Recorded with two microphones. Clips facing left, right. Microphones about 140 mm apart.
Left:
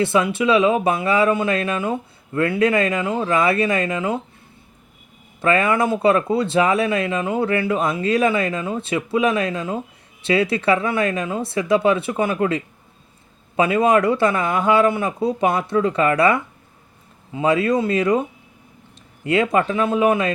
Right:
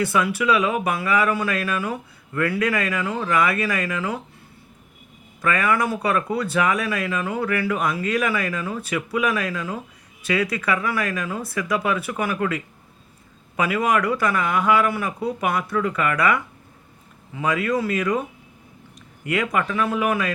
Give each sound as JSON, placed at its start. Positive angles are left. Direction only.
{"t": 0.0, "sound": "speech", "side_deg": 25}
{"t": 5.4, "sound": "speech", "side_deg": 25}